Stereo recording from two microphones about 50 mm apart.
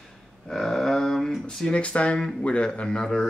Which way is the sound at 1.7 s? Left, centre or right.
Left.